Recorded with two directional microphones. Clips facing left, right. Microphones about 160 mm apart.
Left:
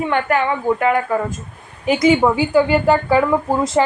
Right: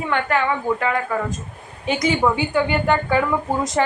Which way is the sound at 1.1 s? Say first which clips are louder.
Left 4 dB; 30° left (ahead or behind).